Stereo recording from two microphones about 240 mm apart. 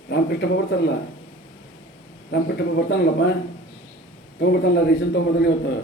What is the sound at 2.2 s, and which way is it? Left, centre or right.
Speech, left.